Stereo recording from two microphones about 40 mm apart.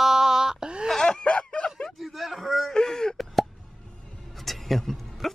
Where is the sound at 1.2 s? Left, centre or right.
Left.